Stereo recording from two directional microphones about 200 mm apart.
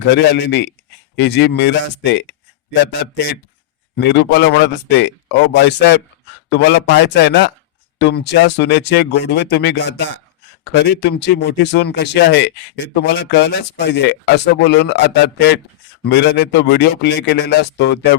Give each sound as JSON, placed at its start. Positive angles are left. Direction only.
{"t": 0.1, "sound": "speech", "side_deg": 60}
{"t": 3.9, "sound": "speech", "side_deg": 55}